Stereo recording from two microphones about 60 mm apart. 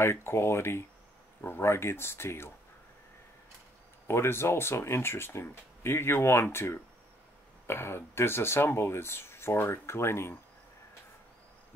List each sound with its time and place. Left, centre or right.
0.0 s speech: left
4.1 s speech: left